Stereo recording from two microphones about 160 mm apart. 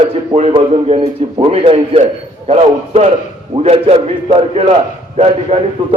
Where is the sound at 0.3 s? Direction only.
35° right (ahead or behind).